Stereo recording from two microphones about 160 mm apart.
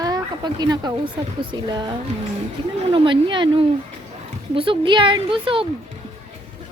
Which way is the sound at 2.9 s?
30° right (ahead or behind).